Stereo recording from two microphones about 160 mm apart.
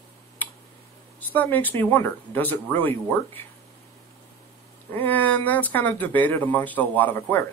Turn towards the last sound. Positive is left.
turn(degrees=10)  # may be behind; listen again after turning